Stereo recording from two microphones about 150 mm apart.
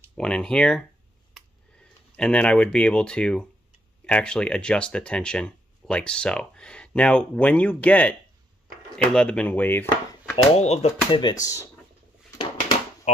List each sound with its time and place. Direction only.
0.2 s speech: 5° left (ahead or behind)
1.3 s a sound: 5° left (ahead or behind)
4.0 s speech: 5° left (ahead or behind)
10.3 s speech: 45° left (ahead or behind)
11.1 s speech: 25° left (ahead or behind)
12.3 s a sound: 25° left (ahead or behind)